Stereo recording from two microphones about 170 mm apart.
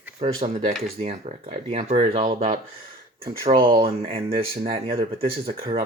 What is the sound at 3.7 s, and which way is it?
Speech, 35° right (ahead or behind).